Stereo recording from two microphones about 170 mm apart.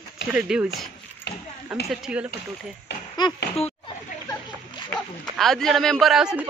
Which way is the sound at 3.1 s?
25° left (ahead or behind).